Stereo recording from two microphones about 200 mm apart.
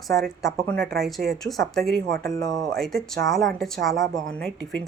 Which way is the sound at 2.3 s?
20° left (ahead or behind).